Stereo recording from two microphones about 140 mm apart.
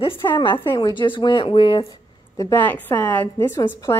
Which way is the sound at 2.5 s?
10° left (ahead or behind).